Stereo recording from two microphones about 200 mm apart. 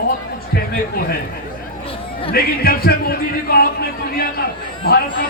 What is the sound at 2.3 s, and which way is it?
A man's voice, 50° left (ahead or behind).